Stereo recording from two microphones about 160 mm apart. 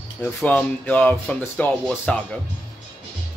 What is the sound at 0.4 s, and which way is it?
A man's voice, 5° left (ahead or behind).